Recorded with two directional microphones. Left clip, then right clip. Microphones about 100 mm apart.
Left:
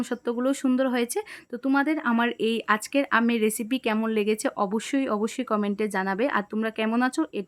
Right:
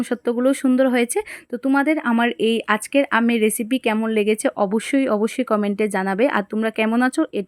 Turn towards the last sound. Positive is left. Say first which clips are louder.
# right 6 dB
turn(degrees=-40)  # may be behind; listen again after turning